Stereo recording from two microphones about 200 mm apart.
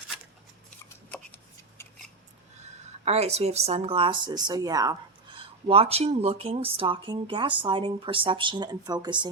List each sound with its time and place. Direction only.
2.6 s a woman's voice: 30° right (ahead or behind)
5.4 s speech: 30° right (ahead or behind)